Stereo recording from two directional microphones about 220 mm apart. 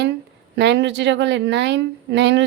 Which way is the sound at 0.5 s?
50° right (ahead or behind).